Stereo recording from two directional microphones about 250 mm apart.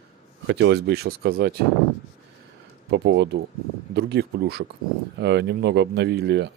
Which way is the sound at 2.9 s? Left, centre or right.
Right.